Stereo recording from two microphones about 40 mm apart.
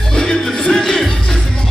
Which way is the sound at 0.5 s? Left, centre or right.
Centre.